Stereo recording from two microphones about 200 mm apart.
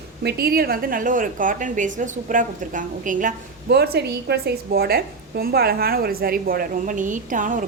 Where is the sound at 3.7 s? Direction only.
55° right (ahead or behind).